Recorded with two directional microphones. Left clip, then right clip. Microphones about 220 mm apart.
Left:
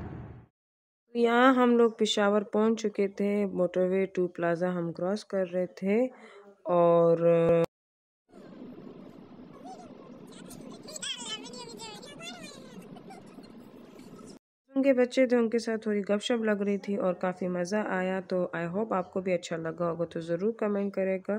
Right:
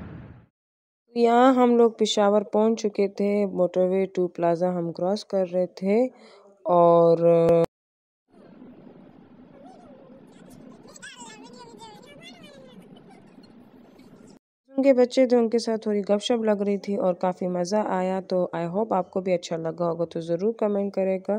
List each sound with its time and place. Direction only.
1.1 s speech: 15° right (ahead or behind)
14.8 s speech: 15° right (ahead or behind)